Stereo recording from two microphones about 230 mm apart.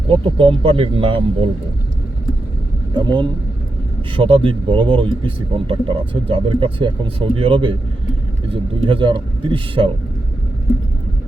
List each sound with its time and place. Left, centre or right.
0.1 s speech: right
2.9 s speech: centre
8.9 s speech: right